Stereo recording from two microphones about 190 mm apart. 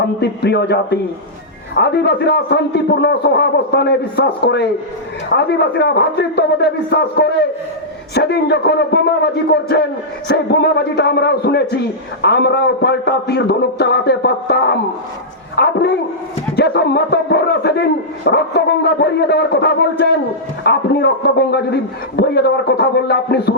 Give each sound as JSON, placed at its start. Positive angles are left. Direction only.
{"t": 0.2, "sound": "a man's voice", "side_deg": 60}